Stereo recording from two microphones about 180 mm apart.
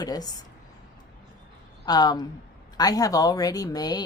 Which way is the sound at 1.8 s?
20° left (ahead or behind).